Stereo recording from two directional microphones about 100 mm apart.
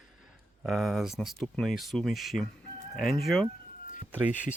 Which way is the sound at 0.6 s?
Centre (ahead or behind).